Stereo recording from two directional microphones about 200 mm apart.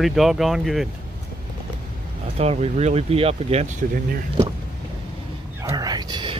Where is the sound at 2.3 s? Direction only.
30° right (ahead or behind).